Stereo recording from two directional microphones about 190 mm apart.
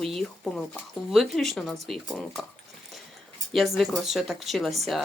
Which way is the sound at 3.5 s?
Centre (ahead or behind).